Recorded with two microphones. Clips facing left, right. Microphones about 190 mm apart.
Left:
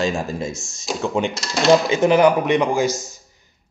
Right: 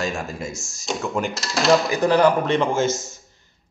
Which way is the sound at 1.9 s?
20° left (ahead or behind).